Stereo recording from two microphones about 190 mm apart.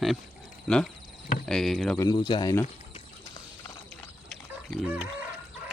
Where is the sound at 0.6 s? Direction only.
5° left (ahead or behind).